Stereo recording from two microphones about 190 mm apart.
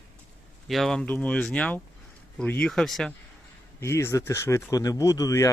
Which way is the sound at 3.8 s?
15° left (ahead or behind).